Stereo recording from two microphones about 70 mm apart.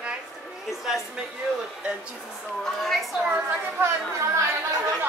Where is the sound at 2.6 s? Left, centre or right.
Centre.